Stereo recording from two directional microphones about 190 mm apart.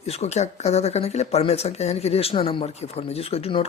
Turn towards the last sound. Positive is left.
turn(degrees=30)  # may be behind; listen again after turning